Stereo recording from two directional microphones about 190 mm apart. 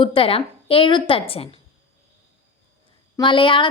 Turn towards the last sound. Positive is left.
turn(degrees=25)  # may be behind; listen again after turning